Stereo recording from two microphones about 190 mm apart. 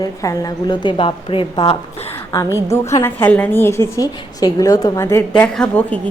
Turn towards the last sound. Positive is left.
turn(degrees=5)  # may be behind; listen again after turning